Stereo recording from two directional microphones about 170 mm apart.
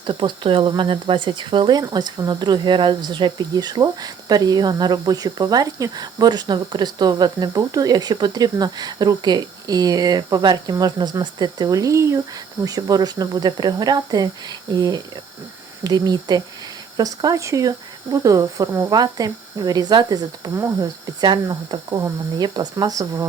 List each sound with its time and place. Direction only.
0.0 s speech: 25° right (ahead or behind)